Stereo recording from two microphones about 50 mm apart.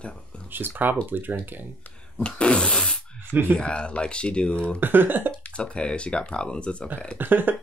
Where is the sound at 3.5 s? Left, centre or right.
Left.